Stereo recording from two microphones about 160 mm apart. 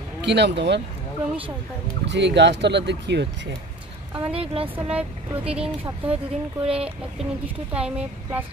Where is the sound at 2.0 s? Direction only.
90° right.